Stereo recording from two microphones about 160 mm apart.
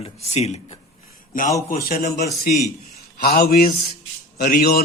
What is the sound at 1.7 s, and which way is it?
Speech, 65° left (ahead or behind).